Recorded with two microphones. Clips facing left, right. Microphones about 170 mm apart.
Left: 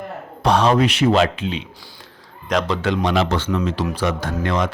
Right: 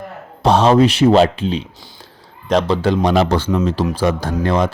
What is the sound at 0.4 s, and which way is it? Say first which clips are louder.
Speech: right 4 dB; 25° right (ahead or behind).